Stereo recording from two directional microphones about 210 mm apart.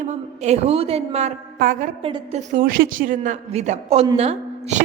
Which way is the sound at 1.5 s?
40° right (ahead or behind).